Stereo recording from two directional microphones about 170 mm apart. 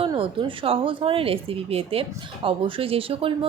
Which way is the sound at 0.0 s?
30° right (ahead or behind).